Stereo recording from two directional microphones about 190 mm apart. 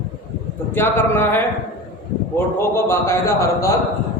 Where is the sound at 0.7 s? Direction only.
10° left (ahead or behind).